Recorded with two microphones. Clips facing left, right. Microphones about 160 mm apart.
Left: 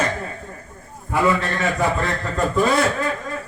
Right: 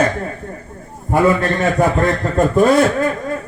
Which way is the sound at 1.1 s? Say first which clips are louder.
Right 5 dB; 50° right (ahead or behind).